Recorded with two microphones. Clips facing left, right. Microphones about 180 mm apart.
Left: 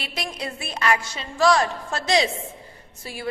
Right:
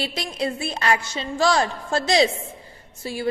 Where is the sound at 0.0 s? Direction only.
30° right (ahead or behind).